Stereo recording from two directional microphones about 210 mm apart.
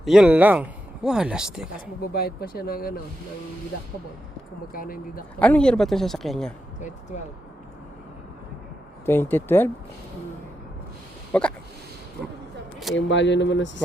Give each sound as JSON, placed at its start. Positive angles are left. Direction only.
{"t": 0.0, "sound": "speech", "side_deg": 0}
{"t": 2.0, "sound": "speech", "side_deg": 45}
{"t": 4.7, "sound": "speech", "side_deg": 45}
{"t": 5.4, "sound": "speech", "side_deg": 5}
{"t": 6.7, "sound": "speech", "side_deg": 35}
{"t": 9.0, "sound": "speech", "side_deg": 10}
{"t": 11.3, "sound": "speech", "side_deg": 5}
{"t": 13.0, "sound": "speech", "side_deg": 60}